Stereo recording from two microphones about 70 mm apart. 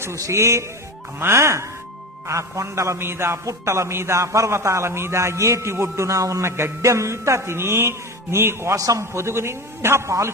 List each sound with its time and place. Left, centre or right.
0.0 s a man's voice: right
8.7 s a man's voice: right